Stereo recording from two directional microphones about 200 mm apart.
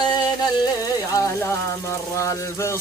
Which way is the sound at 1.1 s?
15° left (ahead or behind).